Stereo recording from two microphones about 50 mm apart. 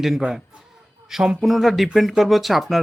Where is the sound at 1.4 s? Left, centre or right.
Centre.